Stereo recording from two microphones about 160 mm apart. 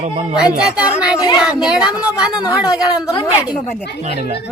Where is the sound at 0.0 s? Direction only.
45° right (ahead or behind).